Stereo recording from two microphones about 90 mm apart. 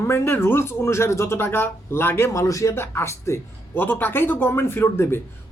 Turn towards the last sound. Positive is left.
turn(degrees=25)  # may be behind; listen again after turning